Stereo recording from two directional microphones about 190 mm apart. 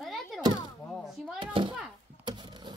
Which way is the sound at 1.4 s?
25° right (ahead or behind).